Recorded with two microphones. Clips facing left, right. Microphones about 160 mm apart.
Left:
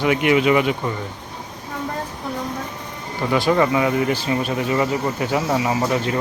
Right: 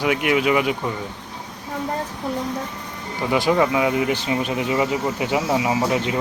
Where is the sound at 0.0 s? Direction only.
5° right (ahead or behind).